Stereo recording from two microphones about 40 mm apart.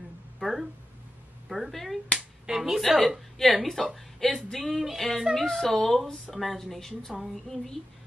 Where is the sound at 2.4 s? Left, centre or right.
Centre.